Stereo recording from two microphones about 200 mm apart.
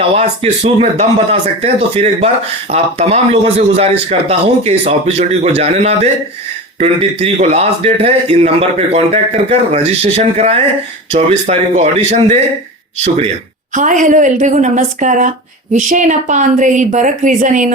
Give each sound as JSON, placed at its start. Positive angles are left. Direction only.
{"t": 0.0, "sound": "speech", "side_deg": -30}
{"t": 13.7, "sound": "speech", "side_deg": -40}